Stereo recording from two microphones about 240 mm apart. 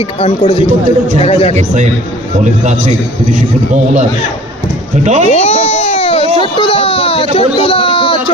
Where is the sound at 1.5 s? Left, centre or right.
Right.